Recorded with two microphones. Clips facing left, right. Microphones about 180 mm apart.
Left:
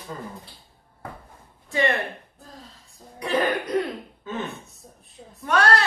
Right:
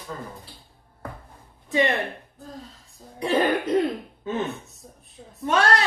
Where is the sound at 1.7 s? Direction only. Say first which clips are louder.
Right 1 dB; 20° right (ahead or behind).